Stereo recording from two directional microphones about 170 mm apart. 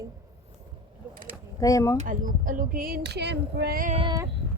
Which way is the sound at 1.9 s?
50° right (ahead or behind).